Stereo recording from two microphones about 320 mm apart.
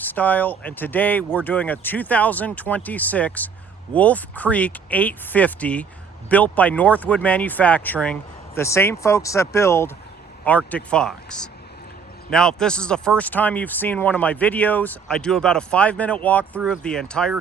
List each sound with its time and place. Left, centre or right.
0.0 s speech: centre